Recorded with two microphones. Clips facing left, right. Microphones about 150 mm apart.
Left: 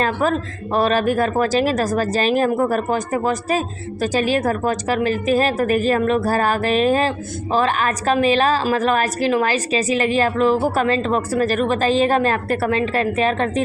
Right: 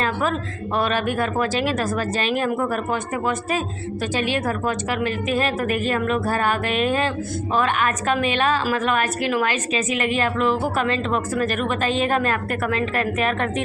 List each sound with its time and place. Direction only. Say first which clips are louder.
0.0 s a woman's voice: left 4 dB; 40° left (ahead or behind)